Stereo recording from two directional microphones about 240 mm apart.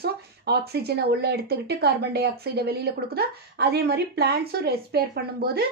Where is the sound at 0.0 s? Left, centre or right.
Right.